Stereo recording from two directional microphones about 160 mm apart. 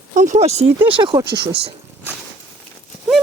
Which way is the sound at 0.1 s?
50° right (ahead or behind).